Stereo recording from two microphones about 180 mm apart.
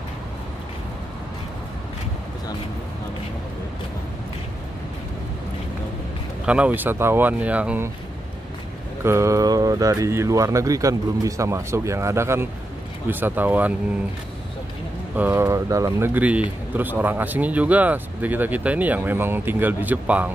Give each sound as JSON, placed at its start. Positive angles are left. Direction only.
{"t": 6.4, "sound": "speech", "side_deg": -5}
{"t": 9.0, "sound": "speech", "side_deg": -15}
{"t": 15.1, "sound": "speech", "side_deg": -15}